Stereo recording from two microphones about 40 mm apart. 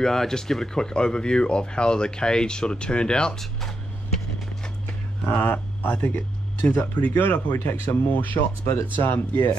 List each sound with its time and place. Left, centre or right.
0.0 s speech: centre
5.4 s speech: left
7.0 s speech: left
7.6 s speech: left
8.1 s speech: left